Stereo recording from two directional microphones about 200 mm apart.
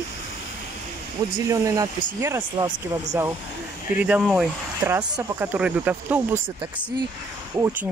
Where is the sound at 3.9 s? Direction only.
5° right (ahead or behind).